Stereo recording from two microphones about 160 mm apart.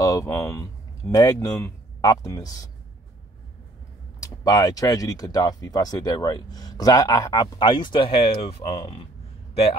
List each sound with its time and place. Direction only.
0.0 s speech: 20° left (ahead or behind)
4.2 s a man's voice: 25° left (ahead or behind)